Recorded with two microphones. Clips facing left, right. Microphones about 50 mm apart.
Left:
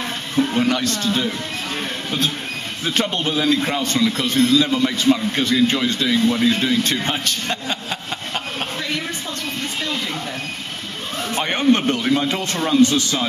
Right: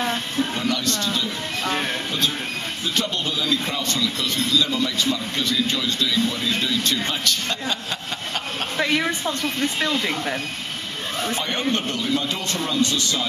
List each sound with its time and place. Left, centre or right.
0.6 s speech: left
2.9 s speech: left
7.0 s speech: left
11.3 s speech: left